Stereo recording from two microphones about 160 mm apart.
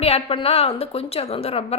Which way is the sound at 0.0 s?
35° left (ahead or behind).